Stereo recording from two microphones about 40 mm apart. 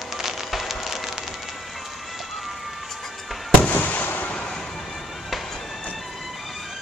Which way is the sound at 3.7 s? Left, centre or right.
Left.